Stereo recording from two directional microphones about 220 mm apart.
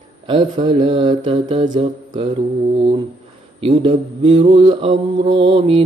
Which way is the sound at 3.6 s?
25° right (ahead or behind).